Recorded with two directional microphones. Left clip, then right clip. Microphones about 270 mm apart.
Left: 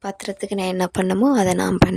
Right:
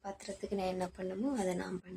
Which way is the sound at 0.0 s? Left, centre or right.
Left.